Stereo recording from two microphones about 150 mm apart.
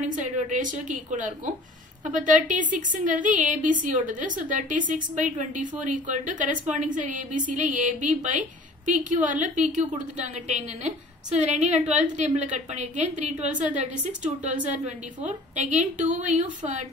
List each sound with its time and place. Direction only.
0.0 s a woman's voice: 55° right (ahead or behind)
11.8 s a woman's voice: 10° right (ahead or behind)
12.2 s a woman's voice: 55° right (ahead or behind)
14.7 s a woman's voice: 50° right (ahead or behind)